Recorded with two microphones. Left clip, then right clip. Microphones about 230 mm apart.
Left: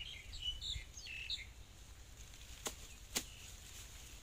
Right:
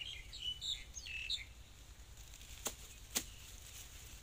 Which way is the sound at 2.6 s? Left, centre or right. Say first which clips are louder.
Right 1 dB; centre.